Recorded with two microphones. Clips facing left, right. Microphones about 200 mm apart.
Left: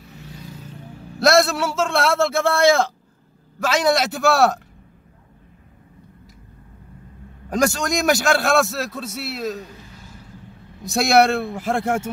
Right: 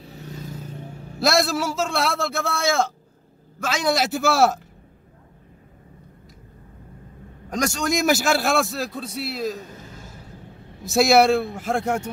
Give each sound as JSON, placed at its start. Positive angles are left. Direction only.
{"t": 0.0, "sound": "vehicle", "side_deg": -40}
{"t": 1.2, "sound": "a man's voice", "side_deg": 0}
{"t": 7.5, "sound": "a man's voice", "side_deg": 0}
{"t": 10.8, "sound": "a man's voice", "side_deg": 0}